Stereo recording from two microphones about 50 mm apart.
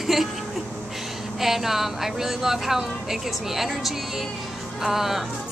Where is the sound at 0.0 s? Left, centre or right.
Centre.